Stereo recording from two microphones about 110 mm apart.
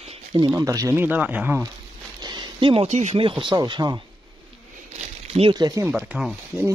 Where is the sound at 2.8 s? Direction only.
90° right.